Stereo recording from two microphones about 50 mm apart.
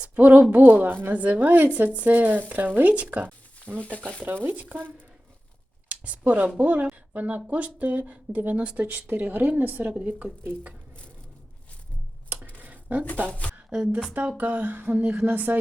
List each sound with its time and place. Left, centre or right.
0.0 s speech: right
1.0 s speech: right
5.9 s speech: right
12.6 s a sound: right
13.7 s speech: centre
14.3 s speech: right